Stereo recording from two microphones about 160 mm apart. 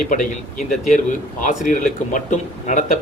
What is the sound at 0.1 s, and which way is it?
A man's voice, 55° left (ahead or behind).